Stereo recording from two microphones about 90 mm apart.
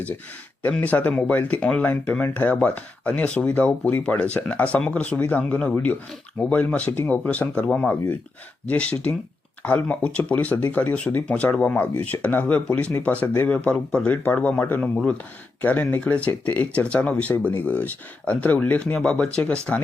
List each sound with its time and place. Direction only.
0.6 s speech: 15° left (ahead or behind)